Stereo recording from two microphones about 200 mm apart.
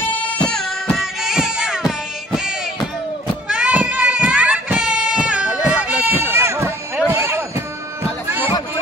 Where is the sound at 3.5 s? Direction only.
5° right (ahead or behind).